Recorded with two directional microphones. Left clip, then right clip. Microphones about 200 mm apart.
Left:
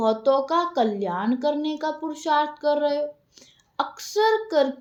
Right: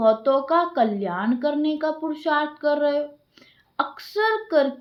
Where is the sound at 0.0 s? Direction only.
25° right (ahead or behind).